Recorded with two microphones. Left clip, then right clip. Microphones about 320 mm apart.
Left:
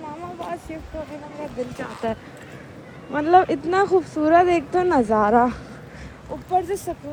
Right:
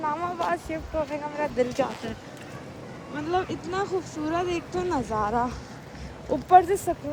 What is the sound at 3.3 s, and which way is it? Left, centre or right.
Speech, centre.